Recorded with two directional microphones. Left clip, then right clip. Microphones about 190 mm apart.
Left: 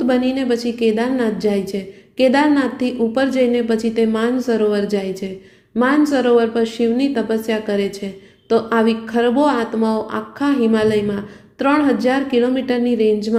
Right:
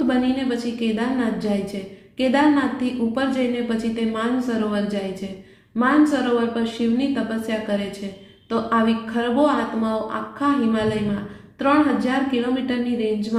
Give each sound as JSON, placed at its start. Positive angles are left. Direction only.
{"t": 0.1, "sound": "a woman's voice", "side_deg": 50}
{"t": 6.1, "sound": "a woman's voice", "side_deg": 50}